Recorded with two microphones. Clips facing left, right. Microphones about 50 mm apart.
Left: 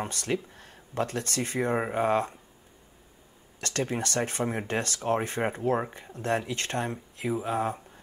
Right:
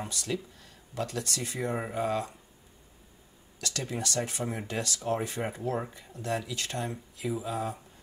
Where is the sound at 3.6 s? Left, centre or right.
Left.